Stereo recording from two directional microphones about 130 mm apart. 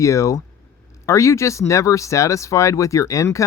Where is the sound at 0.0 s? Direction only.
25° left (ahead or behind).